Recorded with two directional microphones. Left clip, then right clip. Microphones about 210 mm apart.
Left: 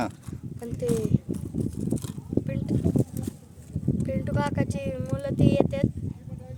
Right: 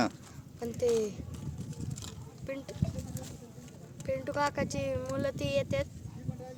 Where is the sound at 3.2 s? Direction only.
35° right (ahead or behind).